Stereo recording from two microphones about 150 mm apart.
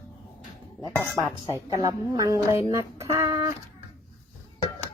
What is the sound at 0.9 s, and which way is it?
Speech, centre (ahead or behind).